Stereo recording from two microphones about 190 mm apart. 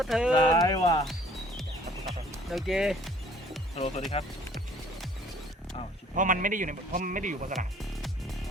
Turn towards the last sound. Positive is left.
turn(degrees=-45)  # may be behind; listen again after turning